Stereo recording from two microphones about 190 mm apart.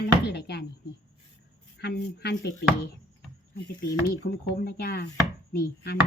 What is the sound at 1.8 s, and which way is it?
Speech, 60° left (ahead or behind).